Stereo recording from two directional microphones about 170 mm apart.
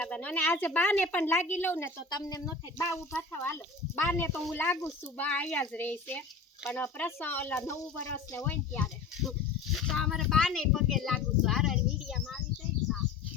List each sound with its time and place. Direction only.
0.0 s a woman's voice: 5° left (ahead or behind)
2.0 s a woman's voice: 25° left (ahead or behind)
4.4 s speech: centre (ahead or behind)
4.6 s a woman's voice: 10° left (ahead or behind)